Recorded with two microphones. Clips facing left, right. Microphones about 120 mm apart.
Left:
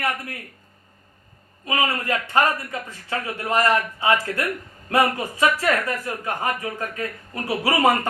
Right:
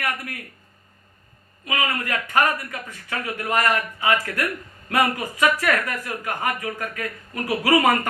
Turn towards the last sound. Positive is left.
turn(degrees=30)  # may be behind; listen again after turning